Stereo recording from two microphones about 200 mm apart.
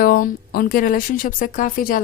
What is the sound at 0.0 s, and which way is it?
A woman's voice, 50° left (ahead or behind).